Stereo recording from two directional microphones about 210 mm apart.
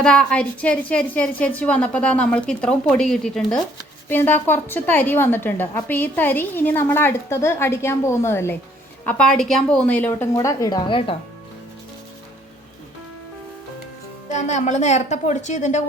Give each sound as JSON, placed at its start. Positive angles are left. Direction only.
{"t": 0.0, "sound": "a woman's voice", "side_deg": 5}
{"t": 14.3, "sound": "a woman's voice", "side_deg": 35}